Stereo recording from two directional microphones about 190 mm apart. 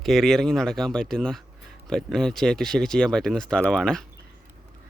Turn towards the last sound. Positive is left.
turn(degrees=5)  # may be behind; listen again after turning